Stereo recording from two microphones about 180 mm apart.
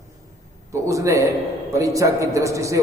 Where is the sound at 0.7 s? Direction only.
15° right (ahead or behind).